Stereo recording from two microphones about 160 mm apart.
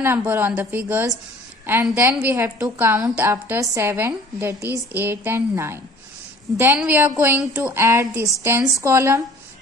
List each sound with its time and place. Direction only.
0.0 s a woman's voice: 15° right (ahead or behind)